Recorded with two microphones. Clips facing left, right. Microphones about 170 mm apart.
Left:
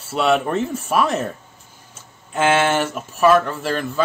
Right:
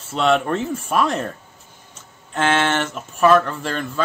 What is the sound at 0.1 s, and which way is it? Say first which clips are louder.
Speech: even; 5° left (ahead or behind).